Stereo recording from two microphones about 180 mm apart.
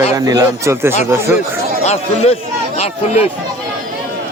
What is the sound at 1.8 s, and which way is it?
Speech, 40° left (ahead or behind).